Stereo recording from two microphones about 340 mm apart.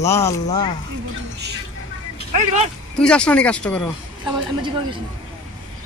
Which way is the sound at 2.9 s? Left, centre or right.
Centre.